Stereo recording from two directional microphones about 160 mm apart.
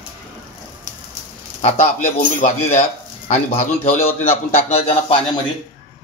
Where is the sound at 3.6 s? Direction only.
15° left (ahead or behind).